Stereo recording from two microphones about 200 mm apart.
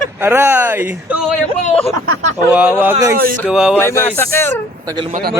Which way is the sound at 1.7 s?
30° left (ahead or behind).